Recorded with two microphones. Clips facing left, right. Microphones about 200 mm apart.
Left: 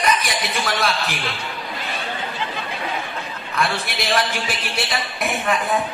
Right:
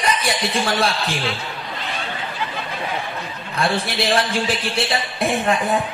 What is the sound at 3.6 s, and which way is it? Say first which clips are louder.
Speech: right 3 dB; 30° right (ahead or behind).